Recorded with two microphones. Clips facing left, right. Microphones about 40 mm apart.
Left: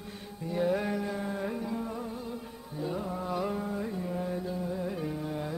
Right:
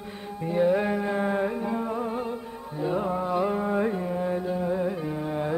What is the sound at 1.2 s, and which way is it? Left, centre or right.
Carnatic music, right.